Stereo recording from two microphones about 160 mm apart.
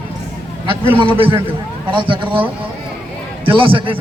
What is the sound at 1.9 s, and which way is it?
Speech, 30° right (ahead or behind).